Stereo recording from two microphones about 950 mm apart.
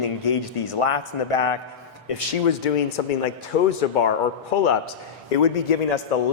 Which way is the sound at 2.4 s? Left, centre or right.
Left.